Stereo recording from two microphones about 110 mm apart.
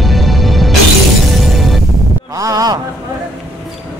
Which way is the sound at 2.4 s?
30° right (ahead or behind).